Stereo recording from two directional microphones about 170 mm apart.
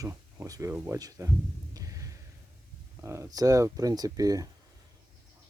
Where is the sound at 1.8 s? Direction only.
20° right (ahead or behind).